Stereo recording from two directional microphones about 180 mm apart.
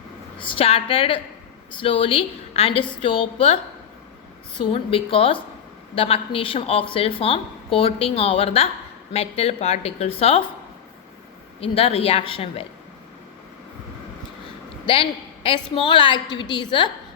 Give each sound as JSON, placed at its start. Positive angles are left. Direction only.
{"t": 0.3, "sound": "a woman's voice", "side_deg": 30}
{"t": 4.6, "sound": "a woman's voice", "side_deg": 30}
{"t": 11.6, "sound": "a woman's voice", "side_deg": 35}
{"t": 14.9, "sound": "a woman's voice", "side_deg": 30}